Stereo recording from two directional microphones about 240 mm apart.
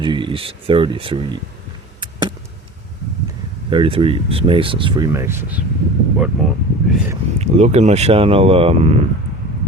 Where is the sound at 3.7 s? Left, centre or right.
Right.